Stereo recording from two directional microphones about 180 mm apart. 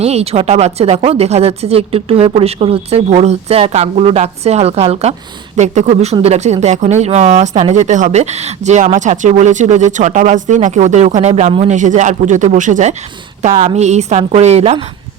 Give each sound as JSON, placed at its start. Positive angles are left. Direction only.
{"t": 0.0, "sound": "speech", "side_deg": -35}